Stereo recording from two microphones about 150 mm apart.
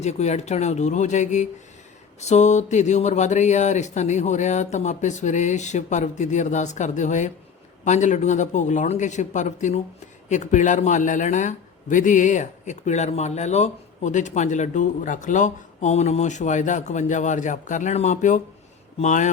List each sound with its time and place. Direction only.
0.0 s speech: 50° left (ahead or behind)